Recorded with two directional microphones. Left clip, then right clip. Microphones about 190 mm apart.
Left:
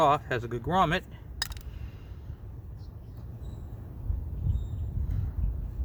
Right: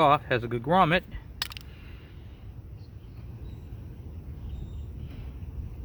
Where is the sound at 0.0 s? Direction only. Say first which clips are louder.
Right 2 dB; 45° right (ahead or behind).